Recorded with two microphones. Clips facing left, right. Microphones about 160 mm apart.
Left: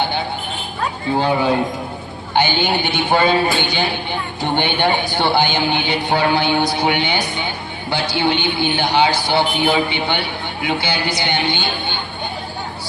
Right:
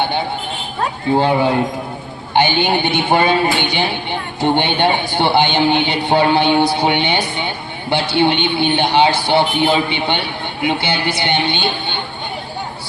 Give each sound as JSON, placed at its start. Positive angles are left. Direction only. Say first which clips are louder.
{"t": 2.3, "sound": "a man's voice", "louder": "right 3 dB", "side_deg": -20}